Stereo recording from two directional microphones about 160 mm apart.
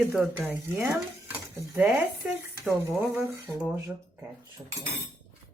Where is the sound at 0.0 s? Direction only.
10° right (ahead or behind).